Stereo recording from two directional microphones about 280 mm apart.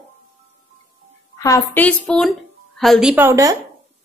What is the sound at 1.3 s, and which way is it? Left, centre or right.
A woman's voice, centre.